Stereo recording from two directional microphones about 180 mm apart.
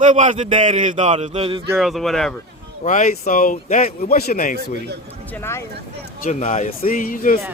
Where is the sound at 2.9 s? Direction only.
45° left (ahead or behind).